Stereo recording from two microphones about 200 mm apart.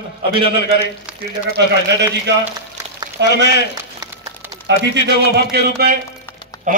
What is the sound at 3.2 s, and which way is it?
Speech, 60° right (ahead or behind).